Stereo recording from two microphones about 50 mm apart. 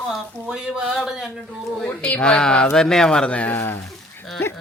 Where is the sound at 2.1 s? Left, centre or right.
Centre.